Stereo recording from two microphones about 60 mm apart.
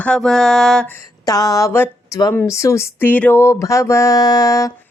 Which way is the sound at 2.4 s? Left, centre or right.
Left.